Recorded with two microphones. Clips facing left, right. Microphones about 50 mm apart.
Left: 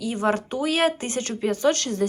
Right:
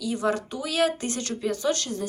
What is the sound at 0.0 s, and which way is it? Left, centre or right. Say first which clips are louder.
Speech: left 2 dB; left.